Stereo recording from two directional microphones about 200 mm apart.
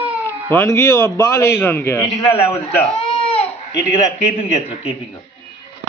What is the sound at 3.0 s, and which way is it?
Baby cry, 30° left (ahead or behind).